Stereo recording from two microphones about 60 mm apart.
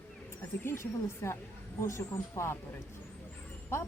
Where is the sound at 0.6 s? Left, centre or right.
Left.